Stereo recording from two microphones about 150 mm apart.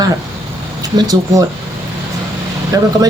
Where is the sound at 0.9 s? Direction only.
25° right (ahead or behind).